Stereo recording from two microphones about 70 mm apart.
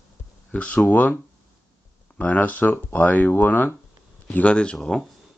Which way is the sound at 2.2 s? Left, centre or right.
Left.